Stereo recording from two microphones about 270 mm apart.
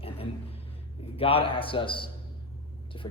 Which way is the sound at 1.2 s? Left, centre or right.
Left.